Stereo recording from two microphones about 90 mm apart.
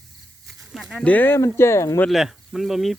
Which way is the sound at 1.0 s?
20° left (ahead or behind).